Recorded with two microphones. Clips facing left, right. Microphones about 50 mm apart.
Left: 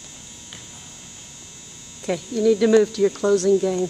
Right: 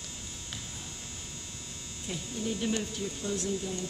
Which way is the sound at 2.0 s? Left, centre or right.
Left.